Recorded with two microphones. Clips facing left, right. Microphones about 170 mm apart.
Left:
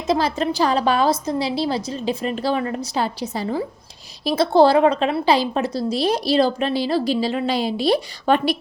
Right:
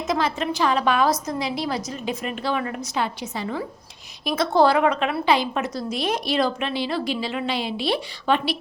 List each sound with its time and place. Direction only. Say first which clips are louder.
0.1 s a woman's voice: left 5 dB; 35° left (ahead or behind)